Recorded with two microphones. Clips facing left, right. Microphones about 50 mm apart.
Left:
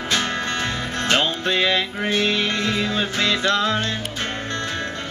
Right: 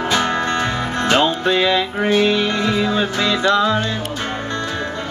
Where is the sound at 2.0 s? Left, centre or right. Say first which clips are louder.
Right 5 dB; centre.